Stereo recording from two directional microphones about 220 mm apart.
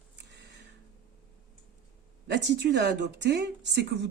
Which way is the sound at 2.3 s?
50° right (ahead or behind).